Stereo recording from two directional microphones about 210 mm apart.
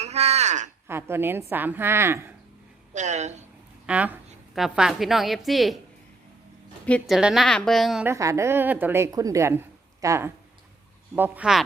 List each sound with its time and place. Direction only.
0.0 s a sound: 30° right (ahead or behind)
0.9 s a woman's voice: 10° right (ahead or behind)
2.9 s speech: 35° right (ahead or behind)
3.8 s a woman's voice: 5° right (ahead or behind)
6.8 s a woman's voice: 5° left (ahead or behind)
8.0 s a woman's voice: 15° right (ahead or behind)